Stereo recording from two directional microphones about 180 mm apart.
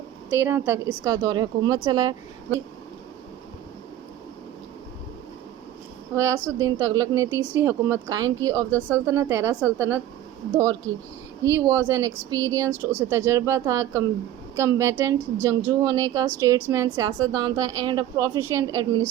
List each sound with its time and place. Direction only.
0.3 s speech: 10° right (ahead or behind)
6.1 s a woman's voice: 15° right (ahead or behind)